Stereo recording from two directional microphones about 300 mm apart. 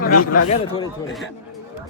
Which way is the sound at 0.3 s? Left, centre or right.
Left.